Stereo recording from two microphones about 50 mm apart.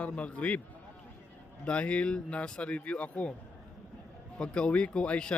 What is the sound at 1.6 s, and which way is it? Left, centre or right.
Speech, left.